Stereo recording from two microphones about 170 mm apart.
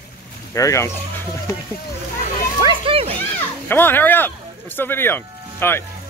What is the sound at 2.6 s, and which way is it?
Children playing, 30° right (ahead or behind).